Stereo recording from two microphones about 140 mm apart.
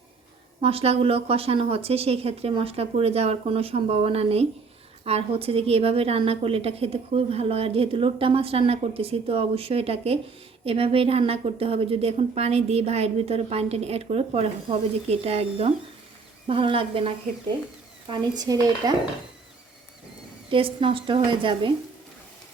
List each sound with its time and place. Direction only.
0.6 s a woman's voice: 45° right (ahead or behind)
18.1 s speech: 30° right (ahead or behind)
20.5 s a woman's voice: 40° right (ahead or behind)